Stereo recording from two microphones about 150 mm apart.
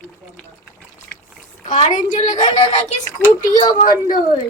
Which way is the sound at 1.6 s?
55° left (ahead or behind).